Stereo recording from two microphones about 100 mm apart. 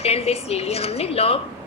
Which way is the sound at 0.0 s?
90° left.